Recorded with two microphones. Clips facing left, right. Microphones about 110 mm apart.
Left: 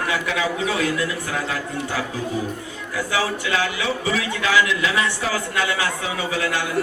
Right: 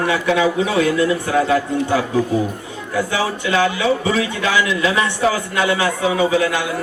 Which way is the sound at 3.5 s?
30° right (ahead or behind).